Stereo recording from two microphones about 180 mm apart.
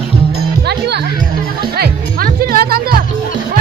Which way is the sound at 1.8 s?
55° right (ahead or behind).